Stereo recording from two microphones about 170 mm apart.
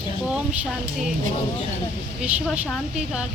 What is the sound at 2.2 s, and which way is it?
A woman's voice, 5° right (ahead or behind).